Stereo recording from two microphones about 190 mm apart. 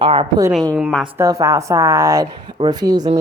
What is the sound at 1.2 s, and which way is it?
A woman's voice, 15° right (ahead or behind).